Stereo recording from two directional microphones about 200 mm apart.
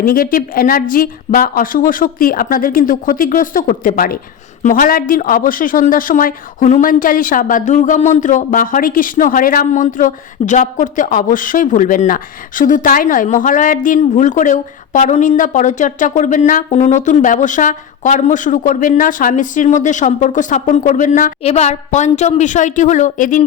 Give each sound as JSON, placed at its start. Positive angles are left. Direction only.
{"t": 0.0, "sound": "a woman's voice", "side_deg": 45}